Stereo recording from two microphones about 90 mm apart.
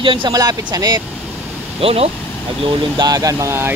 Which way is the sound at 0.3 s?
45° right (ahead or behind).